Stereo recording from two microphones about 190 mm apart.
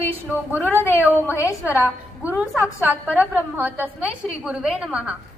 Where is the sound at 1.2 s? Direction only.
15° left (ahead or behind).